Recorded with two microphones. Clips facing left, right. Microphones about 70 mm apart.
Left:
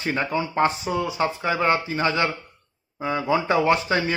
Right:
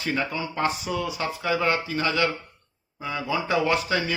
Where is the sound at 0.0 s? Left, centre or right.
Left.